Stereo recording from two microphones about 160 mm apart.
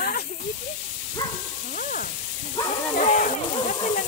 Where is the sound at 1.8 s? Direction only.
60° left (ahead or behind).